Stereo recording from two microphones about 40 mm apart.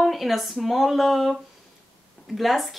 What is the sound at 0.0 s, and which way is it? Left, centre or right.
Speech, centre.